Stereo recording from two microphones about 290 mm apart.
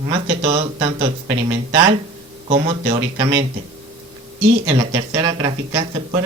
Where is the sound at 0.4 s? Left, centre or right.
Centre.